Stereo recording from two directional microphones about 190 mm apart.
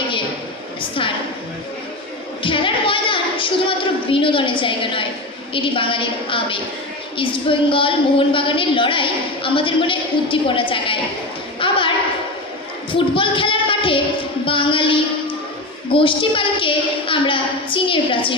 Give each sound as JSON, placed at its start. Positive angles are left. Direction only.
{"t": 0.8, "sound": "a woman's voice", "side_deg": 25}
{"t": 2.4, "sound": "a woman's voice", "side_deg": 25}
{"t": 11.6, "sound": "a sound", "side_deg": 25}
{"t": 12.9, "sound": "a child's voice", "side_deg": 25}